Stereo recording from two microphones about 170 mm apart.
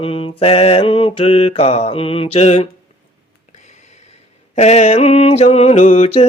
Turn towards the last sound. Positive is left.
turn(degrees=40)  # may be behind; listen again after turning